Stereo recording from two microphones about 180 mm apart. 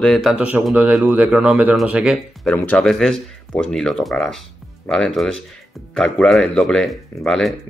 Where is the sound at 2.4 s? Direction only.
10° left (ahead or behind).